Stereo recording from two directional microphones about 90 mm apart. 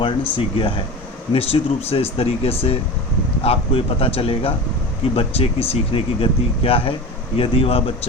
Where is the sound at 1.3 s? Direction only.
90° left.